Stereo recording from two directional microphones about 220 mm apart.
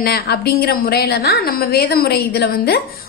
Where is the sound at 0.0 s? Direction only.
45° left (ahead or behind).